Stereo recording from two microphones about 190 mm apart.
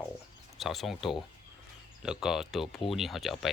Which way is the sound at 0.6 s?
Centre (ahead or behind).